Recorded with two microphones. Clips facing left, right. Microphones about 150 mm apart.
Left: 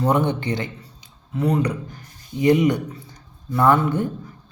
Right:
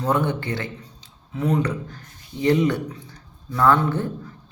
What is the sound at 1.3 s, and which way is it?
Speech, centre (ahead or behind).